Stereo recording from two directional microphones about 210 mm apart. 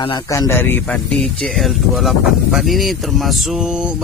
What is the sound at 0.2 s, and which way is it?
A man's voice, 15° left (ahead or behind).